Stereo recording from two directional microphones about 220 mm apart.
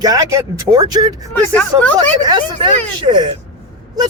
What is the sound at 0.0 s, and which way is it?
Speech, 15° right (ahead or behind).